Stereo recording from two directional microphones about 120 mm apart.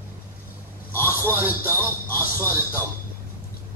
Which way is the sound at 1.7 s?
15° left (ahead or behind).